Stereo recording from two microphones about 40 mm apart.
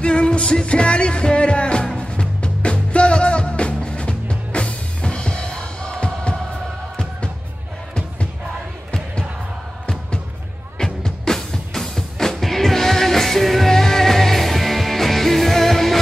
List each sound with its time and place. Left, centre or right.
0.0 s music: left
10.8 s music: centre